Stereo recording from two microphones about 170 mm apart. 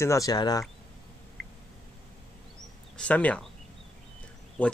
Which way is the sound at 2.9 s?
5° left (ahead or behind).